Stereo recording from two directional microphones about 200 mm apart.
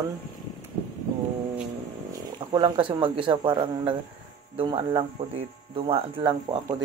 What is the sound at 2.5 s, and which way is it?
Speech, 25° right (ahead or behind).